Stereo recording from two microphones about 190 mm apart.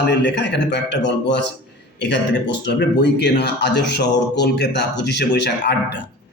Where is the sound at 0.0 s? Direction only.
65° left (ahead or behind).